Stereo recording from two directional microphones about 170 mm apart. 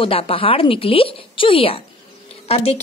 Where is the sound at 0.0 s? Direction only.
35° left (ahead or behind).